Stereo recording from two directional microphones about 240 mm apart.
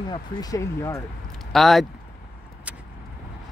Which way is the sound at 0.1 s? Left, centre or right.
Centre.